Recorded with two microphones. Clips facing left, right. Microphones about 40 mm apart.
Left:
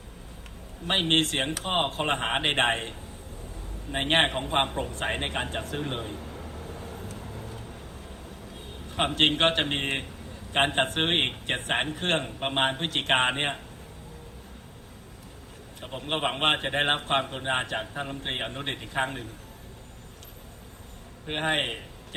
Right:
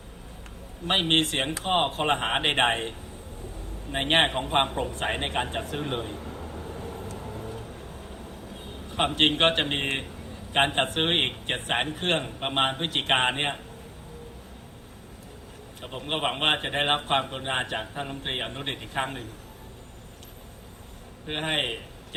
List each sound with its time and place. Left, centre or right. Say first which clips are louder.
0.9 s a man's voice: right 1 dB; centre
3.9 s a man's voice: right 1 dB; centre
6.2 s a sound: right 2 dB; centre
6.5 s vehicle: right 2 dB; centre
7.0 s vehicle: right 2 dB; right
8.9 s a man's voice: right 1 dB; centre
15.8 s a man's voice: even; centre
21.2 s a man's voice: left 1 dB; centre